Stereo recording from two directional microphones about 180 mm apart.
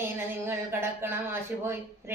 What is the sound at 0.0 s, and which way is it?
A woman's voice, 15° right (ahead or behind).